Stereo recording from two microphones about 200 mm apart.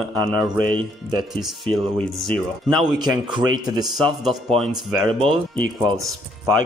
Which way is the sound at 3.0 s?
20° right (ahead or behind).